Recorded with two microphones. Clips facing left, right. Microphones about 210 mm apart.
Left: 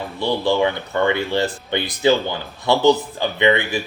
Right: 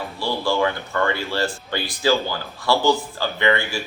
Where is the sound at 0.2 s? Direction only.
20° left (ahead or behind).